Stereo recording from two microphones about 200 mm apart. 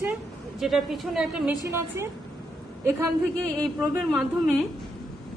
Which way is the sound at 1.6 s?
15° right (ahead or behind).